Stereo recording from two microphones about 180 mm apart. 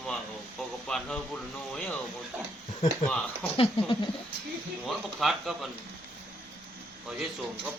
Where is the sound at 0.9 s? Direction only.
5° left (ahead or behind).